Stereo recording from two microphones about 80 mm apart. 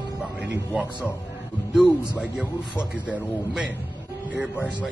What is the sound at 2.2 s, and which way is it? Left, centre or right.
Speech, centre.